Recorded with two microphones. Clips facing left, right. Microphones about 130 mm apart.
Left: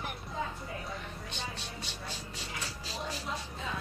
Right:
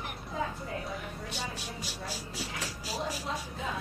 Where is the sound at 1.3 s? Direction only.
10° right (ahead or behind).